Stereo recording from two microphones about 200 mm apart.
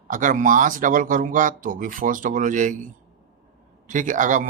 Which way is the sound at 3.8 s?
40° right (ahead or behind).